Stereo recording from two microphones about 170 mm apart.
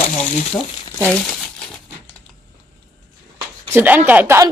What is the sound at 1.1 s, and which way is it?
Crumpling, 5° left (ahead or behind).